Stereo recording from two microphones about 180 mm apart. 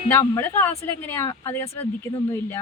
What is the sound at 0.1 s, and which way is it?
Speech, 10° left (ahead or behind).